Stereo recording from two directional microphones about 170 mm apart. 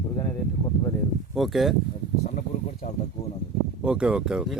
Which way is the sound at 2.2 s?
45° left (ahead or behind).